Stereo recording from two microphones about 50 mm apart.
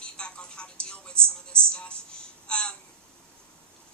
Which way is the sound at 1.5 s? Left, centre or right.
Left.